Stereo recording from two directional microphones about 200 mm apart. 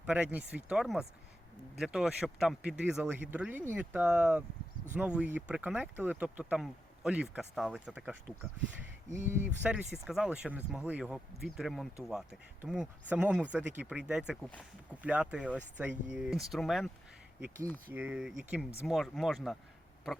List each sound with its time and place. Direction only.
0.0 s speech: 5° right (ahead or behind)
9.0 s speech: 35° right (ahead or behind)
9.6 s speech: 5° right (ahead or behind)
17.9 s speech: 5° right (ahead or behind)